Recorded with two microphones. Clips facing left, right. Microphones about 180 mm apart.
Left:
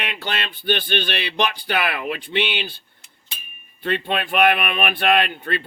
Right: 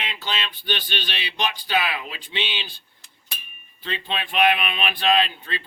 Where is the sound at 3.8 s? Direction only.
55° left (ahead or behind).